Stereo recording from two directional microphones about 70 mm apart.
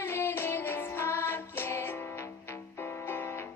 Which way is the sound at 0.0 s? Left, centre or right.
Left.